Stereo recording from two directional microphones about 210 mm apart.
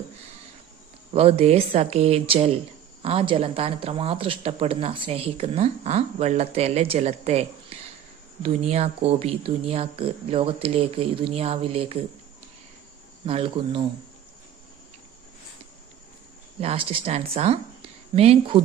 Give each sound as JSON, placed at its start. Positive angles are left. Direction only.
{"t": 1.1, "sound": "speech", "side_deg": -30}
{"t": 13.2, "sound": "speech", "side_deg": -25}
{"t": 16.6, "sound": "speech", "side_deg": -25}